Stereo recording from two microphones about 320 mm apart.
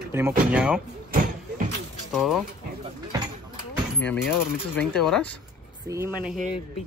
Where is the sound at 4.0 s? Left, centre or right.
Centre.